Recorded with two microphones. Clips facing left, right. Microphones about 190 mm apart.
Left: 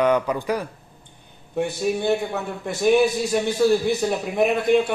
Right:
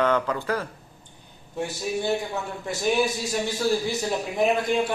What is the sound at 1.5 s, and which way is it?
A man's voice, 60° left (ahead or behind).